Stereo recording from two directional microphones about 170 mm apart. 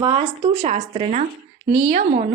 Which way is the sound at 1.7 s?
25° right (ahead or behind).